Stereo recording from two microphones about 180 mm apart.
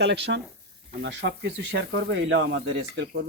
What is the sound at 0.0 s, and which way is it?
Speech, 75° right (ahead or behind).